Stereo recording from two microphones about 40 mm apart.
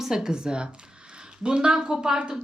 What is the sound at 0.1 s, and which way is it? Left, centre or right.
A woman's voice, centre.